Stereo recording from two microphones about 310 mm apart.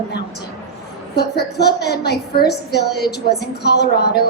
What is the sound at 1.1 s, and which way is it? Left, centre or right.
A woman's voice, left.